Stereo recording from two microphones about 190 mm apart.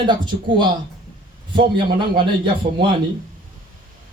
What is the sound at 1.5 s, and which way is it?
Speech, 25° right (ahead or behind).